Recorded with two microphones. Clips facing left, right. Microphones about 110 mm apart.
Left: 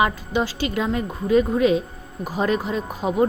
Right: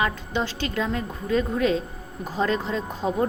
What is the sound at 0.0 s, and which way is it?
A woman's voice, 10° left (ahead or behind).